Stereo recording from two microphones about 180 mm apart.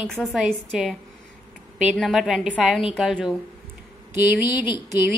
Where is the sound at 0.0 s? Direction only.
Centre (ahead or behind).